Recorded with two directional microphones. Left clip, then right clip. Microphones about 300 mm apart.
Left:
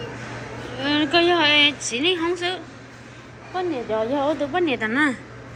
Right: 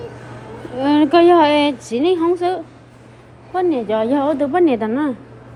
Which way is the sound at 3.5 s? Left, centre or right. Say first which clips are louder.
Right 7 dB; right.